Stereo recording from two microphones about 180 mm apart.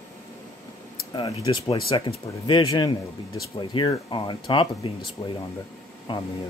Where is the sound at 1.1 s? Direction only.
25° left (ahead or behind).